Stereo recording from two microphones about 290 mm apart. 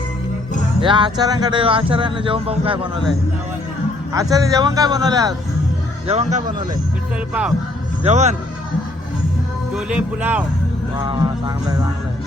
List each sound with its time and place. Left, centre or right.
0.8 s speech: centre
6.1 s speech: right
8.0 s speech: right
9.7 s speech: centre
10.9 s speech: centre